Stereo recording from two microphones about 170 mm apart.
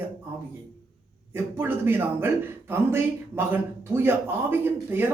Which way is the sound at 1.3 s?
15° right (ahead or behind).